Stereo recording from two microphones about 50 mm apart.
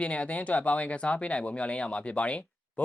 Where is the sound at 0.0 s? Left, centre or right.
Left.